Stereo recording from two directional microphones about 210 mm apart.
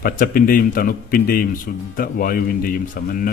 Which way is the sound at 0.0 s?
45° left (ahead or behind).